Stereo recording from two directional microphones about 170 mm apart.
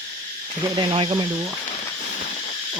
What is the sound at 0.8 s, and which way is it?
Speech, 30° right (ahead or behind).